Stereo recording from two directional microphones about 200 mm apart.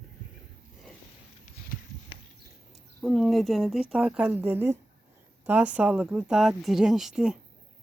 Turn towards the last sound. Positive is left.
turn(degrees=-5)  # may be behind; listen again after turning